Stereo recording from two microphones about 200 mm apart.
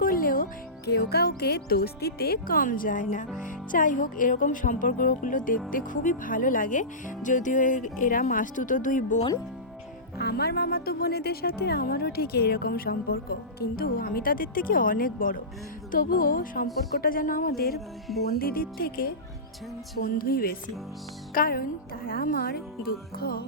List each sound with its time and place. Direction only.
0.0 s music: 45° left (ahead or behind)
0.9 s speech: 55° left (ahead or behind)
10.2 s speech: 55° left (ahead or behind)